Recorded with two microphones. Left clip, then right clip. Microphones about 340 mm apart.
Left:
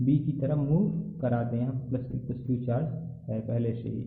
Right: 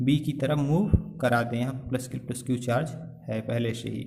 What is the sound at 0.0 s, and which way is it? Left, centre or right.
A man's voice, right.